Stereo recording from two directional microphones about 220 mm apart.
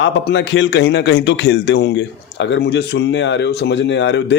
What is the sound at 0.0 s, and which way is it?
A man's voice, 55° left (ahead or behind).